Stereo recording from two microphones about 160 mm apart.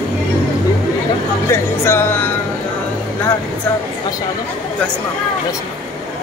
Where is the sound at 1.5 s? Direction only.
15° left (ahead or behind).